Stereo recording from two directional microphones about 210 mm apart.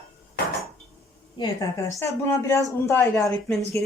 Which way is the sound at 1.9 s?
15° left (ahead or behind).